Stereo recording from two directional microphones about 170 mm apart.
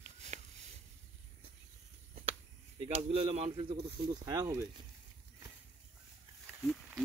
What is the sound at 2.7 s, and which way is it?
Speech, 35° right (ahead or behind).